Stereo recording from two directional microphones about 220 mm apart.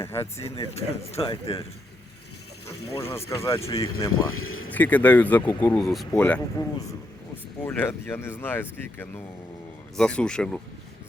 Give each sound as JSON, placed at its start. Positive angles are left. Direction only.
{"t": 0.0, "sound": "speech", "side_deg": 10}
{"t": 0.3, "sound": "speech", "side_deg": 25}
{"t": 3.0, "sound": "speech", "side_deg": 10}
{"t": 4.1, "sound": "speech", "side_deg": 75}
{"t": 4.7, "sound": "speech", "side_deg": 10}
{"t": 5.8, "sound": "speech", "side_deg": 0}
{"t": 6.1, "sound": "speech", "side_deg": 10}
{"t": 10.0, "sound": "speech", "side_deg": 5}